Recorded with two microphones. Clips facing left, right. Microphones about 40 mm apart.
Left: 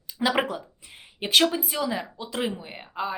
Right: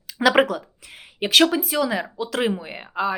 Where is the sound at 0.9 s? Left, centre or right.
Right.